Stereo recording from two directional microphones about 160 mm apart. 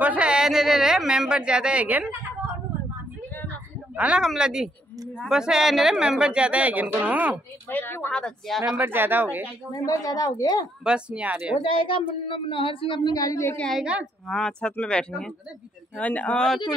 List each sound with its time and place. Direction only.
0.0 s speech: 10° right (ahead or behind)
3.9 s speech: 5° right (ahead or behind)
7.7 s speech: 15° left (ahead or behind)
8.7 s speech: 15° right (ahead or behind)
9.7 s a woman's voice: 20° left (ahead or behind)
10.8 s speech: 5° right (ahead or behind)
11.5 s a woman's voice: 35° left (ahead or behind)
13.6 s speech: centre (ahead or behind)